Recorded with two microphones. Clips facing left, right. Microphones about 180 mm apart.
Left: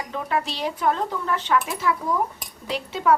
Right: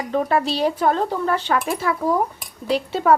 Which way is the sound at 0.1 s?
35° right (ahead or behind).